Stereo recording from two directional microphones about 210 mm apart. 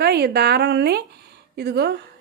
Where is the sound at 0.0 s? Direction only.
50° right (ahead or behind).